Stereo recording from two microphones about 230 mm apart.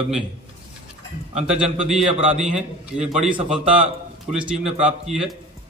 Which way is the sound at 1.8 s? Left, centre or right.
Centre.